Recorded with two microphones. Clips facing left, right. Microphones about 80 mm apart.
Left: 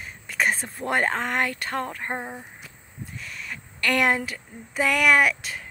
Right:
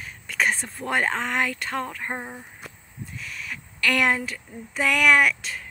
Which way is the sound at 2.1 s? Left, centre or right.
Centre.